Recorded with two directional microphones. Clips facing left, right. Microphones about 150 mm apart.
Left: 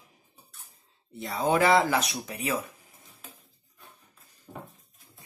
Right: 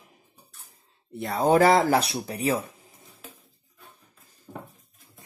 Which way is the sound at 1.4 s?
40° right (ahead or behind).